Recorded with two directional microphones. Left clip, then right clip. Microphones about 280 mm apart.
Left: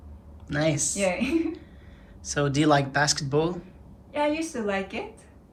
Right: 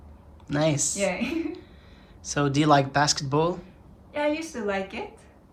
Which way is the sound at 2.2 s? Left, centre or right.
Centre.